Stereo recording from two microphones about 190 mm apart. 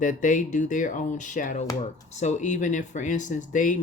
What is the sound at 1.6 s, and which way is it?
Speech, 15° left (ahead or behind).